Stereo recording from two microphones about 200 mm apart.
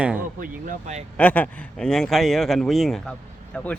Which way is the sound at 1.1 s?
5° left (ahead or behind).